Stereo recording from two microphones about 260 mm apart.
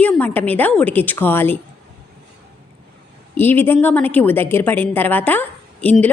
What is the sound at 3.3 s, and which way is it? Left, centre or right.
A woman's voice, centre.